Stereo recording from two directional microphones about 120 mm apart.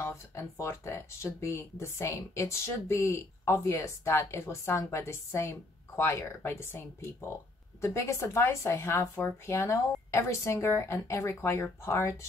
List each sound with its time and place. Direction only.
0.0 s speech: 25° left (ahead or behind)